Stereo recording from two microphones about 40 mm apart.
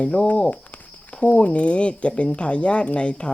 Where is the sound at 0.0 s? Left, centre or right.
Left.